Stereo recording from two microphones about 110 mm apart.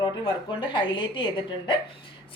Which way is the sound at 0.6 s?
45° left (ahead or behind).